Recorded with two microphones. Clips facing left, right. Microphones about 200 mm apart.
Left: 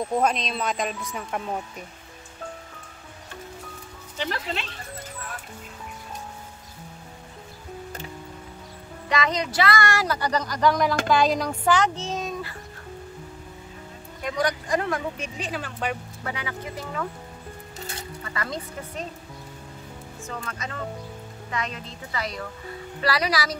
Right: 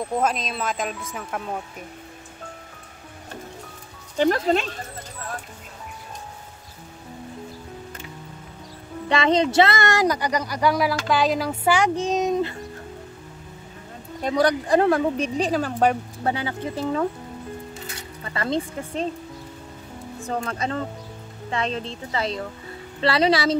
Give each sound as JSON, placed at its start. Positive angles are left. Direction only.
{"t": 0.2, "sound": "speech", "side_deg": -5}
{"t": 4.2, "sound": "speech", "side_deg": -45}
{"t": 9.1, "sound": "speech", "side_deg": -30}
{"t": 14.2, "sound": "speech", "side_deg": -35}
{"t": 18.2, "sound": "a woman's voice", "side_deg": -30}
{"t": 20.2, "sound": "a woman's voice", "side_deg": -35}